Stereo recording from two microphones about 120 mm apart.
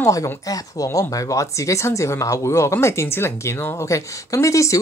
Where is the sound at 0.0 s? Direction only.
30° left (ahead or behind).